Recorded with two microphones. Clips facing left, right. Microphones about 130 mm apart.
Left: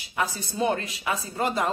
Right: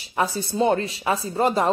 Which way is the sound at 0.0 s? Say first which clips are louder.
Right 5 dB; 30° right (ahead or behind).